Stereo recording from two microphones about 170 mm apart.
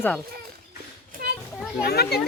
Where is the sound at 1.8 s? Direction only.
65° left (ahead or behind).